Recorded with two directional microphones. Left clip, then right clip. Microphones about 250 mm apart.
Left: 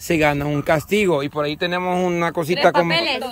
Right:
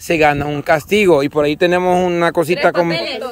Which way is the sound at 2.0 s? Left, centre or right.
Centre.